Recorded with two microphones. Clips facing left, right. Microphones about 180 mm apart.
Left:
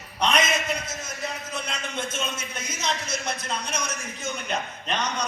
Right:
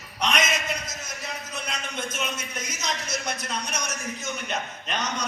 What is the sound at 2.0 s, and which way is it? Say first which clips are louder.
A man's voice: left 1 dB; 30° left (ahead or behind).